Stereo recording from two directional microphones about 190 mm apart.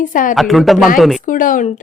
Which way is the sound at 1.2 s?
45° left (ahead or behind).